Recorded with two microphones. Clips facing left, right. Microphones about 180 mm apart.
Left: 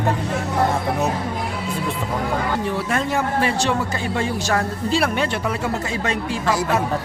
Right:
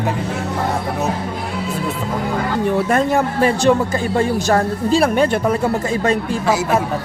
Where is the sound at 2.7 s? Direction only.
45° right (ahead or behind).